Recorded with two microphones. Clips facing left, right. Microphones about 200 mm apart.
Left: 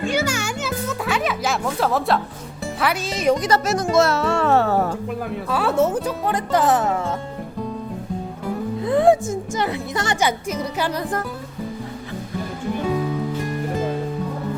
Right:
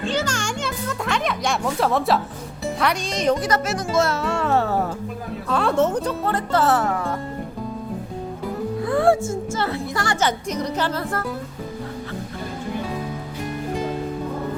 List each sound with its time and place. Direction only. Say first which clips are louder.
0.0 s music: left 2 dB; 10° left (ahead or behind)
2.8 s speech: left 1 dB; 5° left (ahead or behind)
3.9 s music: left 3 dB; 75° left (ahead or behind)
5.5 s speech: even; 5° left (ahead or behind)
8.8 s speech: left 3 dB; 20° left (ahead or behind)
10.2 s speech: even; 10° left (ahead or behind)